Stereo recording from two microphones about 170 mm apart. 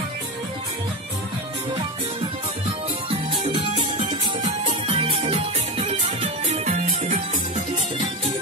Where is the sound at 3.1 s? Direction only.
35° right (ahead or behind).